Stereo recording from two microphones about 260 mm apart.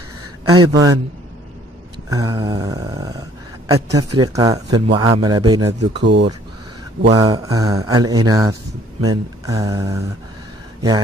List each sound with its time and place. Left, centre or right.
0.5 s a man's voice: centre
2.0 s a man's voice: centre
7.1 s a man's voice: centre